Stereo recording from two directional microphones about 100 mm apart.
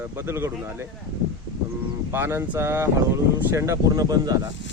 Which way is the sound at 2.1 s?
25° right (ahead or behind).